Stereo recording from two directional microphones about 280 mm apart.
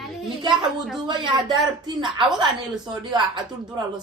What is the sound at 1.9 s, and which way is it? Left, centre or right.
A woman's voice, centre.